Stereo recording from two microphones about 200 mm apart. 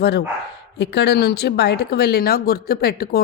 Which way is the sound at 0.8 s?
55° left (ahead or behind).